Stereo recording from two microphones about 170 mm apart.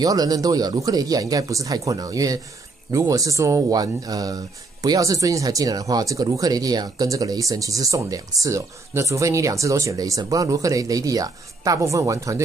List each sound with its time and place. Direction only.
0.0 s speech: 20° right (ahead or behind)